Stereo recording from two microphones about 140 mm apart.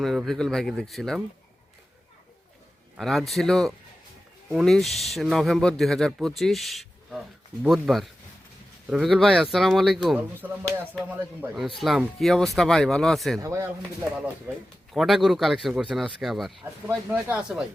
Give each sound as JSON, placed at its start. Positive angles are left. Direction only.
{"t": 0.0, "sound": "speech", "side_deg": 0}
{"t": 3.0, "sound": "speech", "side_deg": 0}
{"t": 10.2, "sound": "speech", "side_deg": -10}
{"t": 11.8, "sound": "speech", "side_deg": 0}
{"t": 13.4, "sound": "speech", "side_deg": -20}
{"t": 14.9, "sound": "speech", "side_deg": 0}
{"t": 17.1, "sound": "speech", "side_deg": -15}